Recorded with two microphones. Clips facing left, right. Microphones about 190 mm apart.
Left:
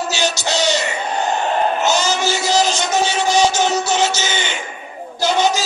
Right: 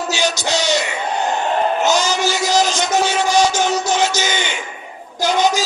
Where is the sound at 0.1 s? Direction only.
10° right (ahead or behind).